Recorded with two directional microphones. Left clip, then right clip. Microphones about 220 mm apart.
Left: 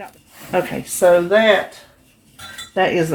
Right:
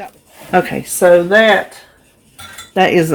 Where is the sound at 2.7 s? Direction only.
50° right (ahead or behind).